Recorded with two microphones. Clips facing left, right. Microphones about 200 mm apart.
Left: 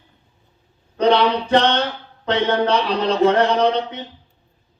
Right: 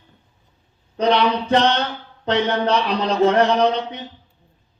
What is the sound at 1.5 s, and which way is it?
Mantra, 30° left (ahead or behind).